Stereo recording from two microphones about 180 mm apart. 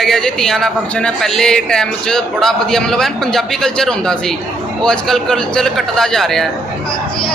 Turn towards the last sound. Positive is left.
turn(degrees=0)  # may be behind; listen again after turning